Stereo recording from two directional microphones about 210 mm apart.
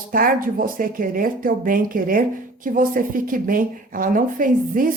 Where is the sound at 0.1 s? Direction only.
40° right (ahead or behind).